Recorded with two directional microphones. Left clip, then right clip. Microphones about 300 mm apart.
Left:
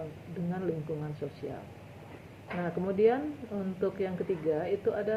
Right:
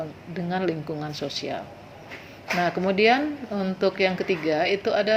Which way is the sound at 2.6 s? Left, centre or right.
Right.